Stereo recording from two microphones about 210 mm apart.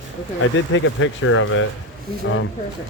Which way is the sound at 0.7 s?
70° left (ahead or behind).